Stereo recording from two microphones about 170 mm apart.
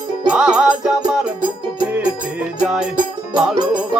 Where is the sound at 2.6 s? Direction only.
5° right (ahead or behind).